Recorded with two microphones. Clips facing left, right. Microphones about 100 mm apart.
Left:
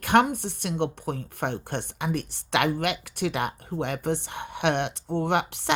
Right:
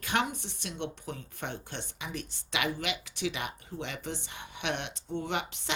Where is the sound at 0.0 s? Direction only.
55° left (ahead or behind).